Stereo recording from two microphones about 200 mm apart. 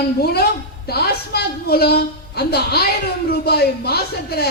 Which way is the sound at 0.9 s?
55° left (ahead or behind).